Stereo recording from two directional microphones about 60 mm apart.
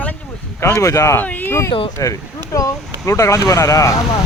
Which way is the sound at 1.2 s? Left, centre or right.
Left.